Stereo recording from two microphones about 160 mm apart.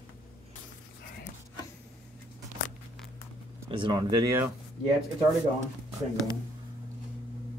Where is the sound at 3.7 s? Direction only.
30° right (ahead or behind).